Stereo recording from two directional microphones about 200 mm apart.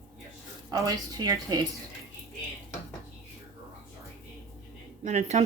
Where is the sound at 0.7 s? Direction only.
20° right (ahead or behind).